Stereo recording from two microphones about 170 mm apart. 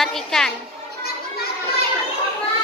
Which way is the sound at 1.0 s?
65° left (ahead or behind).